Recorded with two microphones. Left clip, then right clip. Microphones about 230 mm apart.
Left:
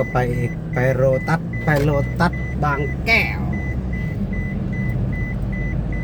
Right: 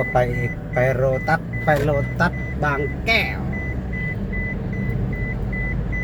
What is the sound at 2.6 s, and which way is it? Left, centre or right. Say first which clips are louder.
Speech: even; centre.